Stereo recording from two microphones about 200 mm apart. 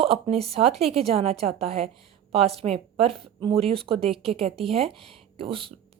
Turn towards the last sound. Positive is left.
turn(degrees=-25)  # may be behind; listen again after turning